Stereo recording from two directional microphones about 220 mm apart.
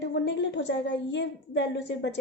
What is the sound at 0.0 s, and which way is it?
A woman's voice, 55° left (ahead or behind).